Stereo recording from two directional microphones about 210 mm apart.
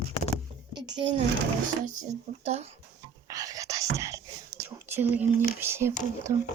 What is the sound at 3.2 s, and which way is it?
Whispering, 15° right (ahead or behind).